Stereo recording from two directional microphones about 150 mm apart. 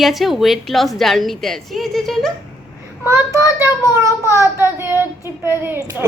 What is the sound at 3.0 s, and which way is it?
A child's voice, 15° right (ahead or behind).